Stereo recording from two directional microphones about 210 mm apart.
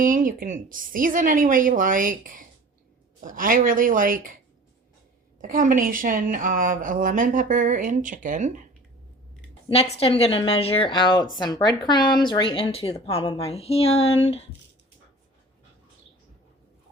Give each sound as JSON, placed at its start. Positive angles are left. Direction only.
{"t": 0.0, "sound": "a woman's voice", "side_deg": -40}
{"t": 5.4, "sound": "a woman's voice", "side_deg": -40}
{"t": 9.6, "sound": "speech", "side_deg": 25}